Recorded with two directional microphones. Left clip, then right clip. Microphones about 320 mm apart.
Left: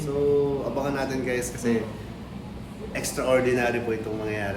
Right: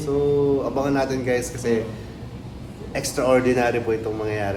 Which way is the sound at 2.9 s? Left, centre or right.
Centre.